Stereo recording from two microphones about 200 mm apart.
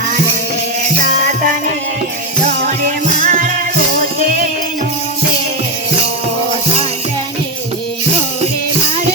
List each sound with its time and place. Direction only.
1.2 s music: 45° right (ahead or behind)
2.8 s music: 45° right (ahead or behind)